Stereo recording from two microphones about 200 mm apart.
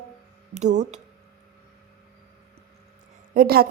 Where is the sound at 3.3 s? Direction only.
50° right (ahead or behind).